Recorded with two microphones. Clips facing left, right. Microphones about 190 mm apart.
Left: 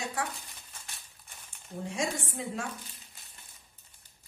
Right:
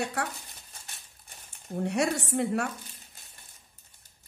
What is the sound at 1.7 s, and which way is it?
Speech, 65° right (ahead or behind).